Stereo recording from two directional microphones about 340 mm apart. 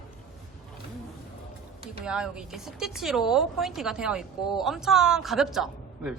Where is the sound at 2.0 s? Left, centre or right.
Centre.